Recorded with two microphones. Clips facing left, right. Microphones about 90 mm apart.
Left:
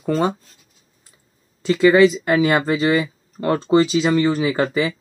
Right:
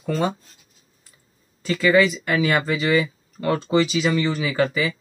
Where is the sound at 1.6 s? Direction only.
25° left (ahead or behind).